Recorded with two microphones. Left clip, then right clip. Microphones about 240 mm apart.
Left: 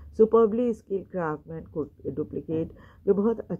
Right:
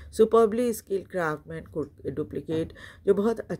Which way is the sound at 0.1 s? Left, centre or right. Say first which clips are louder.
Even; right.